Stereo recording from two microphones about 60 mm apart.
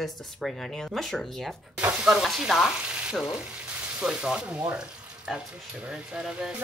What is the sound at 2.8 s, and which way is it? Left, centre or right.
Speech, centre.